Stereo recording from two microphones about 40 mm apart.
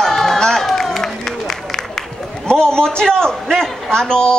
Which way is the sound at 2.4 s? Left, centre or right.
Left.